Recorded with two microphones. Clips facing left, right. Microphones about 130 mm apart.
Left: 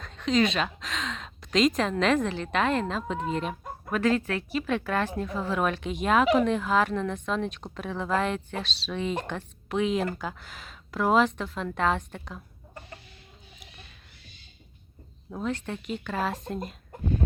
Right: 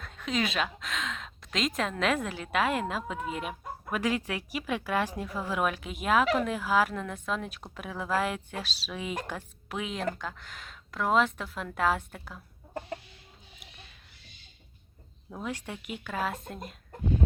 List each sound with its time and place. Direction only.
0.0 s speech: 5° right (ahead or behind)
15.4 s speech: 10° right (ahead or behind)